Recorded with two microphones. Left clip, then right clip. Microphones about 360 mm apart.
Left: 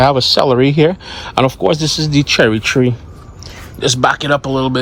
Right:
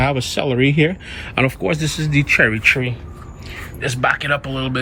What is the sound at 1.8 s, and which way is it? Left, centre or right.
Speech, centre.